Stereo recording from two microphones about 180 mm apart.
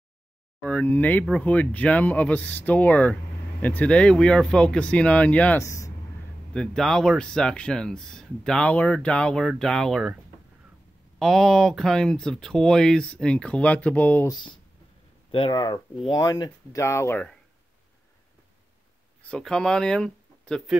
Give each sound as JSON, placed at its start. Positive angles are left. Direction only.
{"t": 0.6, "sound": "speech", "side_deg": 10}
{"t": 6.5, "sound": "speech", "side_deg": 5}
{"t": 11.1, "sound": "speech", "side_deg": 0}
{"t": 14.3, "sound": "speech", "side_deg": 25}
{"t": 19.2, "sound": "speech", "side_deg": 5}